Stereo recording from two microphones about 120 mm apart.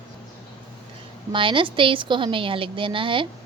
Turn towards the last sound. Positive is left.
turn(degrees=-45)  # may be behind; listen again after turning